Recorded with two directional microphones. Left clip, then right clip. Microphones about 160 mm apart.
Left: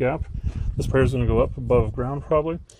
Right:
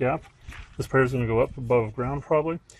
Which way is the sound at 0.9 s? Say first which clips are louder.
Left 1 dB; 45° left (ahead or behind).